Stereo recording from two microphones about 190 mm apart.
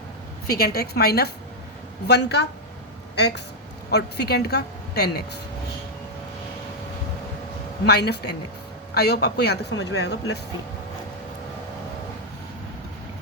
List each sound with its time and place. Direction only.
0.4 s speech: 55° left (ahead or behind)
7.9 s speech: 60° left (ahead or behind)